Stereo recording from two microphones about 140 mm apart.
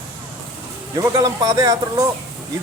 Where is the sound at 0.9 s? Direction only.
30° right (ahead or behind).